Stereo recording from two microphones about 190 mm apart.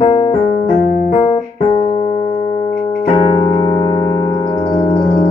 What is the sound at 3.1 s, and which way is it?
Music, 20° left (ahead or behind).